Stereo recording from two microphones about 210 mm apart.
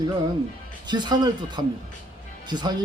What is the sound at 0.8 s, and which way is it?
Speech, 20° right (ahead or behind).